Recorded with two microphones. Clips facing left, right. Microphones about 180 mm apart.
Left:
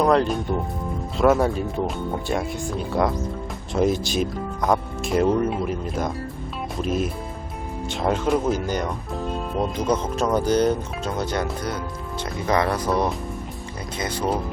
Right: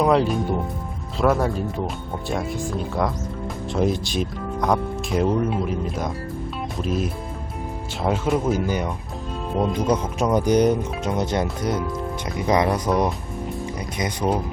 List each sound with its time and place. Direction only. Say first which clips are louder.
0.0 s speech: even; 5° right (ahead or behind)